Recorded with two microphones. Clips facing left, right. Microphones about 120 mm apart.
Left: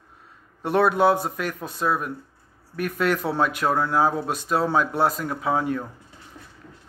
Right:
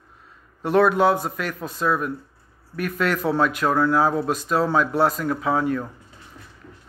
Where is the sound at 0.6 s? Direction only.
25° left (ahead or behind).